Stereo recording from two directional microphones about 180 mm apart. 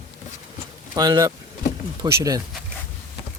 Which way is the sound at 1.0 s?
20° right (ahead or behind).